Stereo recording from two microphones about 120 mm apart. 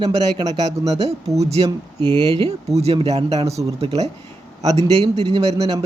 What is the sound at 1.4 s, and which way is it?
Speech, 60° right (ahead or behind).